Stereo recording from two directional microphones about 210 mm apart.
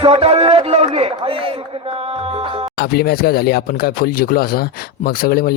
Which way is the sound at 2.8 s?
50° left (ahead or behind).